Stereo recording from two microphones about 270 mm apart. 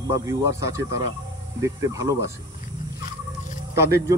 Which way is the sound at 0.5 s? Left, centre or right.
Centre.